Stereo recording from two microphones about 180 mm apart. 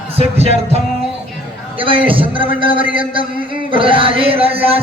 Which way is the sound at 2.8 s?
10° right (ahead or behind).